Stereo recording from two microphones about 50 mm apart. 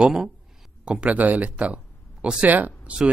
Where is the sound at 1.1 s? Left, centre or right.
Right.